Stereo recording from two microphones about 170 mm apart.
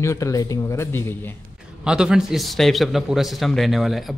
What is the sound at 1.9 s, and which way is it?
A man's voice, 5° right (ahead or behind).